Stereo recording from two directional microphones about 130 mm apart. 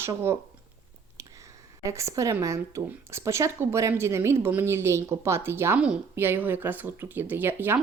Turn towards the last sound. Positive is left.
turn(degrees=-15)  # may be behind; listen again after turning